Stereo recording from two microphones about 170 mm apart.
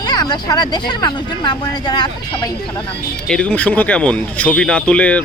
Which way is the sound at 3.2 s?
5° left (ahead or behind).